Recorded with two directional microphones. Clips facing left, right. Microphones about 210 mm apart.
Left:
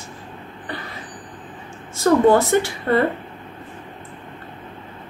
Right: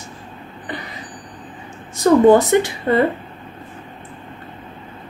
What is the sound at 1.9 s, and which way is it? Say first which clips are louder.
Speech: right 4 dB; 20° right (ahead or behind).